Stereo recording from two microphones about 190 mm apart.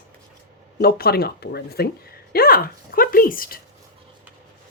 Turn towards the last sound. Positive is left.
turn(degrees=50)  # may be behind; listen again after turning